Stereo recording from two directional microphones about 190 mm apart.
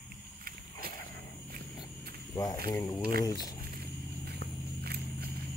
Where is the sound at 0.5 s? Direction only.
50° right (ahead or behind).